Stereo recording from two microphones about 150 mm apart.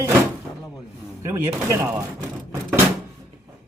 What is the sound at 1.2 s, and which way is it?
Speech, 20° right (ahead or behind).